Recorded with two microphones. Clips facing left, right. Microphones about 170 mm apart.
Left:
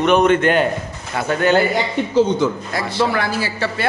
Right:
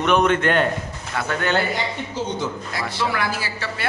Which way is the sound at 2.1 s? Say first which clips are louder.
Left 14 dB; 90° left.